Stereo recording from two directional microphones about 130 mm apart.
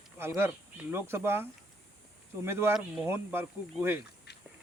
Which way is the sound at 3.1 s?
15° right (ahead or behind).